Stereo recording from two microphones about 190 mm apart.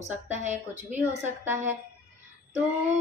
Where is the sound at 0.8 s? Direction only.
10° right (ahead or behind).